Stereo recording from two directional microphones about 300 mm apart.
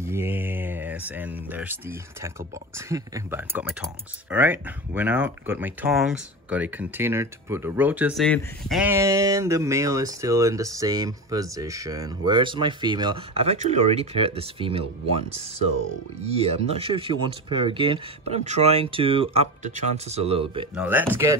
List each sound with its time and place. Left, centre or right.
0.0 s speech: centre
20.7 s speech: centre